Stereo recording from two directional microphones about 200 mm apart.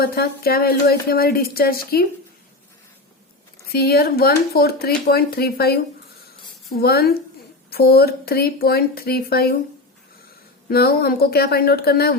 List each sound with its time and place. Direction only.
0.0 s speech: 50° left (ahead or behind)
3.7 s speech: 50° left (ahead or behind)
10.7 s speech: 50° left (ahead or behind)